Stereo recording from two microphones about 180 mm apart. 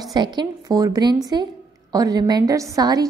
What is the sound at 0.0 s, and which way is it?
A woman's voice, 25° right (ahead or behind).